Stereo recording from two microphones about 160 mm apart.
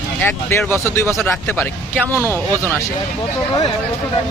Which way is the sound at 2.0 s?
15° right (ahead or behind).